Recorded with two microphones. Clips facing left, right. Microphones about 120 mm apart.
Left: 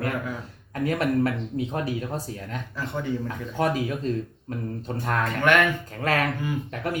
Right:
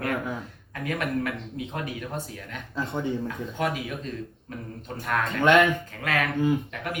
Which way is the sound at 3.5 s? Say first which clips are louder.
Left 5 dB; 35° left (ahead or behind).